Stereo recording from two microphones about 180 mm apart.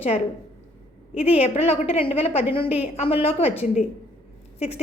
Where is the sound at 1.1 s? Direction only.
35° left (ahead or behind).